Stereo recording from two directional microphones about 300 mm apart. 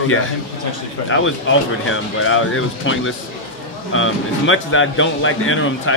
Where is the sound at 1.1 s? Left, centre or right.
Left.